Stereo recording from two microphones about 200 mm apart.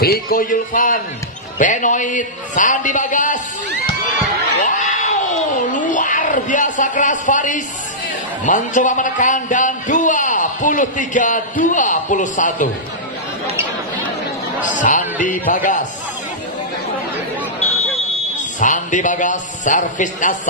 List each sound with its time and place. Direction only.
0.0 s a man's voice: 50° left (ahead or behind)
4.6 s a sound: 40° left (ahead or behind)
8.5 s a man's voice: 40° left (ahead or behind)
14.6 s a man's voice: 40° left (ahead or behind)
18.6 s a man's voice: 40° left (ahead or behind)